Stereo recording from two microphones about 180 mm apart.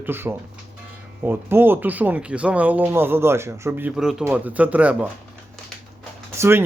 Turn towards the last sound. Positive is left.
turn(degrees=-15)  # may be behind; listen again after turning